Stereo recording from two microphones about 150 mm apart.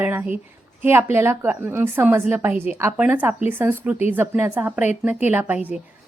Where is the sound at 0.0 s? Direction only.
15° right (ahead or behind).